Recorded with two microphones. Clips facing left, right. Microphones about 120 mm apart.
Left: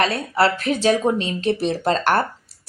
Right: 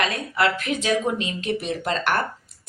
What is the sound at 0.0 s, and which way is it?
A woman's voice, 35° left (ahead or behind).